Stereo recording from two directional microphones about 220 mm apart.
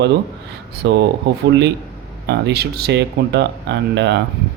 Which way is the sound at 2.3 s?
50° right (ahead or behind).